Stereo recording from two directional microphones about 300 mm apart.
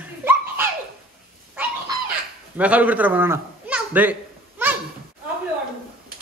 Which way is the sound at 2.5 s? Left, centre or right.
Centre.